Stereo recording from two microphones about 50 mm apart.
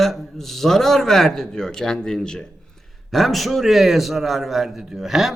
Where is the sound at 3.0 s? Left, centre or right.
Centre.